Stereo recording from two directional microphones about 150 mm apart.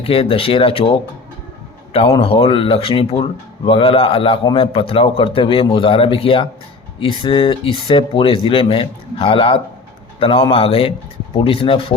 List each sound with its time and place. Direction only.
0.0 s speech: 40° left (ahead or behind)